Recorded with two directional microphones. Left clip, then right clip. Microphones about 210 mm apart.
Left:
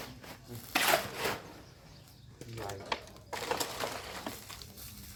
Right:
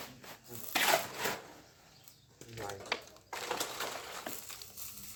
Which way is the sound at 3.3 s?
20° left (ahead or behind).